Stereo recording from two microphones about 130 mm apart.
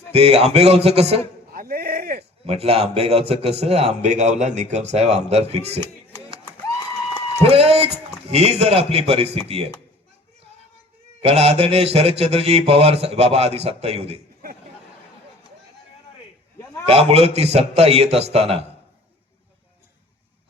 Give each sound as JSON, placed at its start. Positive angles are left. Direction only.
{"t": 0.1, "sound": "a man's voice", "side_deg": -50}
{"t": 2.5, "sound": "a man's voice", "side_deg": -50}
{"t": 7.4, "sound": "a man's voice", "side_deg": -50}
{"t": 11.2, "sound": "a man's voice", "side_deg": -50}
{"t": 16.8, "sound": "a man's voice", "side_deg": -50}